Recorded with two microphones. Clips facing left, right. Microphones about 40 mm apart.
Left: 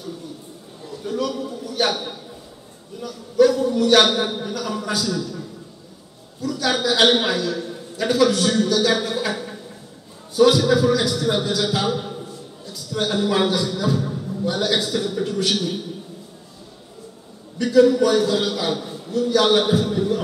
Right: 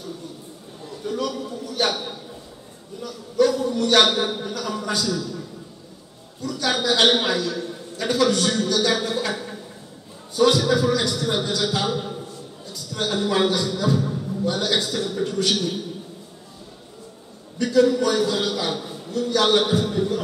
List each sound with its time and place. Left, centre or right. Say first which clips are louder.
1.0 s a man's voice: left 2 dB; centre
17.6 s a man's voice: left 3 dB; centre